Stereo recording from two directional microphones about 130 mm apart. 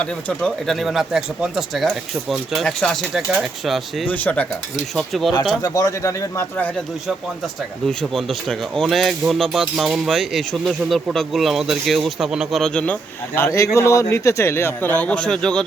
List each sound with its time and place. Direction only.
0.0 s speech: 5° left (ahead or behind)
4.0 s a man's voice: 10° left (ahead or behind)
4.9 s speech: centre (ahead or behind)
5.3 s speech: 35° left (ahead or behind)
7.9 s a man's voice: centre (ahead or behind)